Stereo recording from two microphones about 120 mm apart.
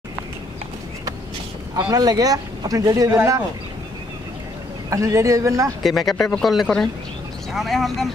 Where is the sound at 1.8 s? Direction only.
30° right (ahead or behind).